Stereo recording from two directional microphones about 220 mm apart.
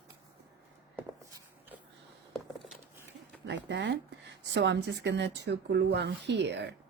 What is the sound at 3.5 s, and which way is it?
Speech, 55° right (ahead or behind).